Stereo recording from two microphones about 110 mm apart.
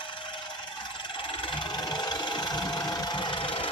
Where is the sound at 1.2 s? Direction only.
50° left (ahead or behind).